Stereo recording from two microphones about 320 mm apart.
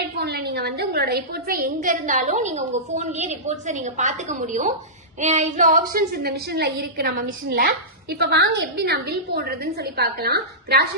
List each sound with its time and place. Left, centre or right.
0.2 s a woman's voice: right